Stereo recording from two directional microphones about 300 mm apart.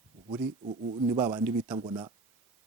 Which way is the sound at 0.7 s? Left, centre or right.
Right.